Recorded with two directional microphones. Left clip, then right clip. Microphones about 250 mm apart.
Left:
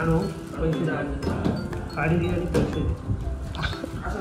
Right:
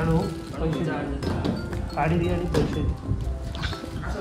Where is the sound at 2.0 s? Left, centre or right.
Right.